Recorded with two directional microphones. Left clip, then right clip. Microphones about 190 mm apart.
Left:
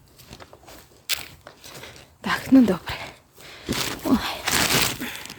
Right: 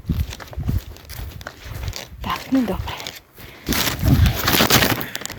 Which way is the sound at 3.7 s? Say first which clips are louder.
Right 5 dB; 65° right (ahead or behind).